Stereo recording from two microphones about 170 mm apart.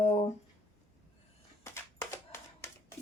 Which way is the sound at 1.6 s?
15° left (ahead or behind).